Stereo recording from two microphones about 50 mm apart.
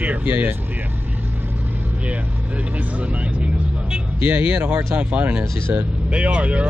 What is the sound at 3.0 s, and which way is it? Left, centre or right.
Speech, right.